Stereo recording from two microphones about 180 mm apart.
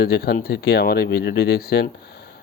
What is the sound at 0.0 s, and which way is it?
Speech, 65° left (ahead or behind).